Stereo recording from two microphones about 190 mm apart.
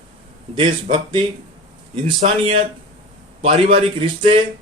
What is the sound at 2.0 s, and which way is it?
Speech, 30° right (ahead or behind).